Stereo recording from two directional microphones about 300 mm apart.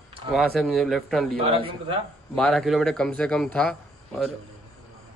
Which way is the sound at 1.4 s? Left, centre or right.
Centre.